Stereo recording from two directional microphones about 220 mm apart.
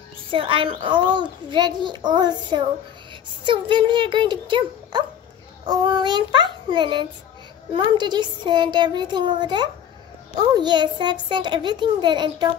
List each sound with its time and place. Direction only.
0.3 s a child's voice: 25° right (ahead or behind)